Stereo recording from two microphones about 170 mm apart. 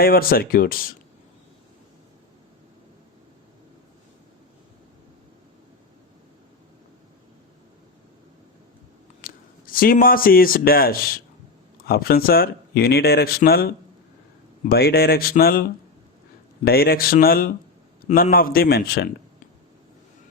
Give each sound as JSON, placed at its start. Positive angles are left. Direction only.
{"t": 0.0, "sound": "speech", "side_deg": 60}
{"t": 9.2, "sound": "speech", "side_deg": 55}
{"t": 16.6, "sound": "speech", "side_deg": 65}